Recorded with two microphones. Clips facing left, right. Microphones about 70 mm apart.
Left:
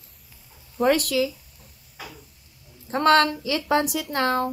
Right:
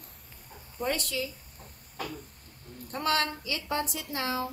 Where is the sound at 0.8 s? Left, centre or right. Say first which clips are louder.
Left 11 dB; left.